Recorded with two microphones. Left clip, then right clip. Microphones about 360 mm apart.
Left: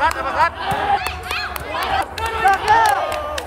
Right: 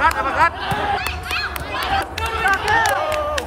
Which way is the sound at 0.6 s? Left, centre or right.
Left.